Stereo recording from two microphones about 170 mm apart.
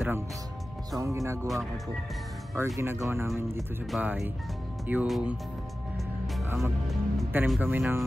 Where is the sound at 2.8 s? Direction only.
15° right (ahead or behind).